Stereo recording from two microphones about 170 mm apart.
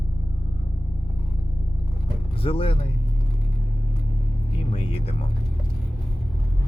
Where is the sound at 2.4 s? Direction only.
30° left (ahead or behind).